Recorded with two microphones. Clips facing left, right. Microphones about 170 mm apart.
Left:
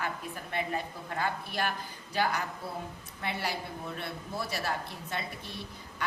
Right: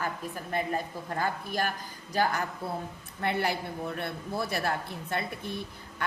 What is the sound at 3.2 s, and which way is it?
A woman's voice, 55° right (ahead or behind).